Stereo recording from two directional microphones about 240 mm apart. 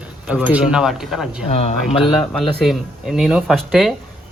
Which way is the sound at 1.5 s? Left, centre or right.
Left.